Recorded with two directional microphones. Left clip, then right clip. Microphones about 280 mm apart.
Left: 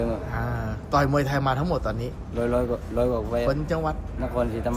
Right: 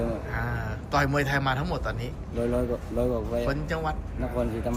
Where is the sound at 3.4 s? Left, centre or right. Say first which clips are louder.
Left 4 dB; centre.